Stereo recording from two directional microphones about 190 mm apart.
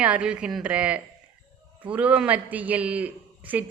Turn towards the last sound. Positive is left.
turn(degrees=-10)  # may be behind; listen again after turning